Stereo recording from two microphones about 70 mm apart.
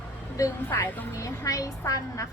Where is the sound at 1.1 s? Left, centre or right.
Left.